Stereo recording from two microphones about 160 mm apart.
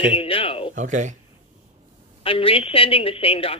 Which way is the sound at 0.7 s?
50° right (ahead or behind).